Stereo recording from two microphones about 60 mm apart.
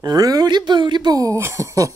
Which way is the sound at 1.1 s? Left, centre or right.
Right.